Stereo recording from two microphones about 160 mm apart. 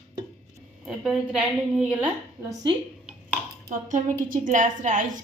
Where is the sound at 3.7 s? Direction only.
50° right (ahead or behind).